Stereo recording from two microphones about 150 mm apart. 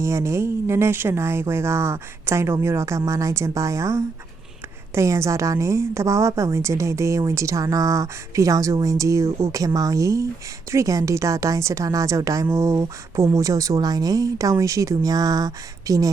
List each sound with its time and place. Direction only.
0.0 s a woman's voice: 20° right (ahead or behind)